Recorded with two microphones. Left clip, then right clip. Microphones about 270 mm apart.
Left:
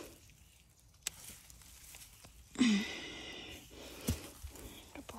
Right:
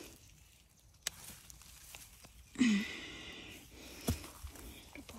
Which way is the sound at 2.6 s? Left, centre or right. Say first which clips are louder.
Left 1 dB; centre.